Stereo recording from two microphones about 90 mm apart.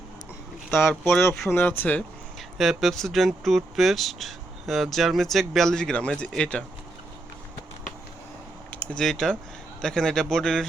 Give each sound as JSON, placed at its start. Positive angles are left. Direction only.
{"t": 0.7, "sound": "speech", "side_deg": 30}
{"t": 2.6, "sound": "speech", "side_deg": 0}
{"t": 8.7, "sound": "typing", "side_deg": 15}
{"t": 9.0, "sound": "speech", "side_deg": 5}